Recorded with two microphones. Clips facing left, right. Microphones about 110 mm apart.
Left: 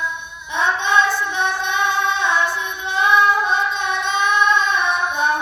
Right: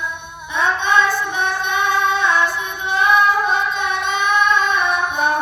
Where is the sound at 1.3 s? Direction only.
50° right (ahead or behind).